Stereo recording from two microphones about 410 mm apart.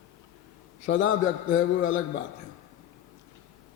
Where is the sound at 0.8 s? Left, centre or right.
Left.